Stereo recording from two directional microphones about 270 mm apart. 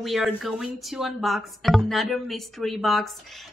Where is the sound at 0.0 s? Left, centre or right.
Centre.